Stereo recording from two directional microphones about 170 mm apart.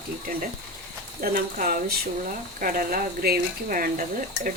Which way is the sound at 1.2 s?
55° right (ahead or behind).